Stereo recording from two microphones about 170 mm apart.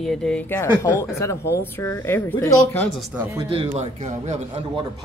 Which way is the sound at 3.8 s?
40° right (ahead or behind).